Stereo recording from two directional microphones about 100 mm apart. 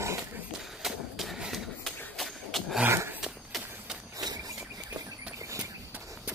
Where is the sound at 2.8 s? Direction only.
25° right (ahead or behind).